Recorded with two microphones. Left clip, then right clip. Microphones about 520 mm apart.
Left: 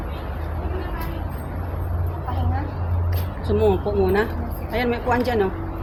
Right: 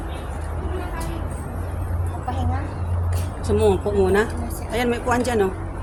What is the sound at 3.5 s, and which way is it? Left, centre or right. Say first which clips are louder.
Speech: right 1 dB; right.